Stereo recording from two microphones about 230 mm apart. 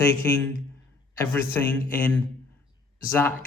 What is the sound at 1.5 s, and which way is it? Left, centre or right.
Speech, centre.